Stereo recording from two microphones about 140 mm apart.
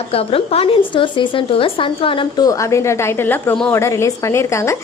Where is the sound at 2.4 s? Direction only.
25° left (ahead or behind).